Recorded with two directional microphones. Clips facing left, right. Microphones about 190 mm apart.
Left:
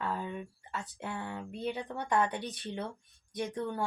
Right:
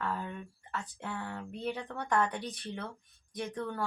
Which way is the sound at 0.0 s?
15° left (ahead or behind).